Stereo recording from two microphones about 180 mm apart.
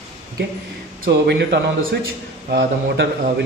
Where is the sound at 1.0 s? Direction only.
70° right (ahead or behind).